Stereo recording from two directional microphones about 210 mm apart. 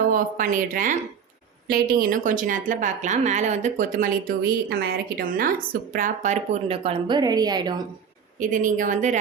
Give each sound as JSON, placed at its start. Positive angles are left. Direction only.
{"t": 0.1, "sound": "a woman's voice", "side_deg": -40}
{"t": 8.4, "sound": "a woman's voice", "side_deg": -40}